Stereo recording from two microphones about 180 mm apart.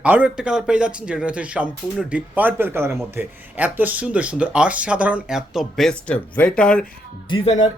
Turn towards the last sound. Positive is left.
turn(degrees=30)  # may be behind; listen again after turning